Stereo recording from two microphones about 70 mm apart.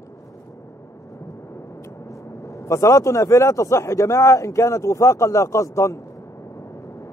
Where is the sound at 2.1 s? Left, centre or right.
Left.